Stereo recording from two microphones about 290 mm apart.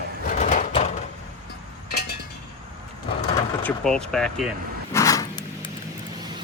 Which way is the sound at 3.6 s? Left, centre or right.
Centre.